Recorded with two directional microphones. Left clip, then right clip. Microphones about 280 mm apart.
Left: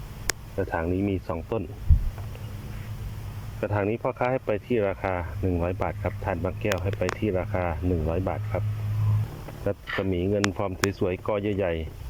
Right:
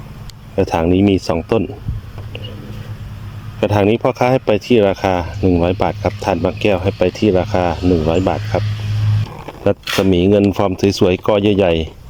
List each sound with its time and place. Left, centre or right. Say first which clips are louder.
0.5 s speech: right 15 dB; centre
3.6 s speech: right 13 dB; centre
9.6 s speech: right 13 dB; centre